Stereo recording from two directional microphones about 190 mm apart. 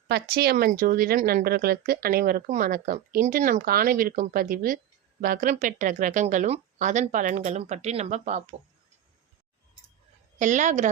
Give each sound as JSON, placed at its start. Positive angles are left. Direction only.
{"t": 0.1, "sound": "speech", "side_deg": -55}
{"t": 10.3, "sound": "speech", "side_deg": -40}